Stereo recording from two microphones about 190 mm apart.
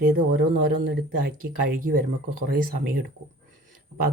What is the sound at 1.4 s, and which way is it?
Speech, 50° right (ahead or behind).